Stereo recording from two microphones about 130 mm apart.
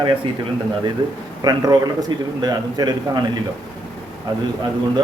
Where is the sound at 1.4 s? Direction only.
30° right (ahead or behind).